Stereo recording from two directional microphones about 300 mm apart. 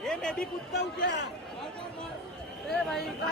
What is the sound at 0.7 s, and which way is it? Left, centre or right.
Speech, left.